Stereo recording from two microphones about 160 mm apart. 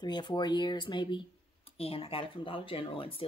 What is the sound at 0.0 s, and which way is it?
Speech, 25° left (ahead or behind).